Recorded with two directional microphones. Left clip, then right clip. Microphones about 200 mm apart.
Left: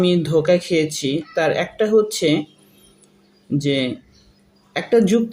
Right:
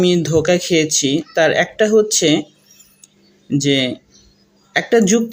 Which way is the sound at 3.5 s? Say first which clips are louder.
Right 4 dB; 20° right (ahead or behind).